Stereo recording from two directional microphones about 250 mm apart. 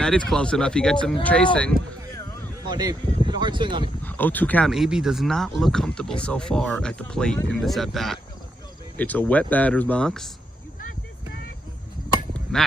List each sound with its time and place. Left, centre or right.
0.0 s speech: centre
2.6 s speech: centre
4.0 s speech: centre
12.5 s speech: centre